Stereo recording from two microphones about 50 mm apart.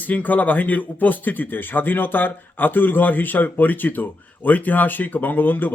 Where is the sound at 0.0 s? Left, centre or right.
Left.